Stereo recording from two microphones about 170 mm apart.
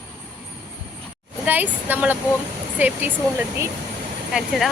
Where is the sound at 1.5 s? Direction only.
10° right (ahead or behind).